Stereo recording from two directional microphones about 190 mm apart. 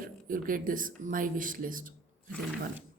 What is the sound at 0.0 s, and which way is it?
Speech, 45° right (ahead or behind).